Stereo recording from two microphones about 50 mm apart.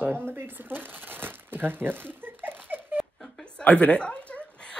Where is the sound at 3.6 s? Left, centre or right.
Left.